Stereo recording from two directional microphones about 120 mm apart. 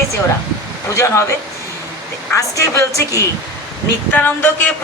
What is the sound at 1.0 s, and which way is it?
Speech, 20° left (ahead or behind).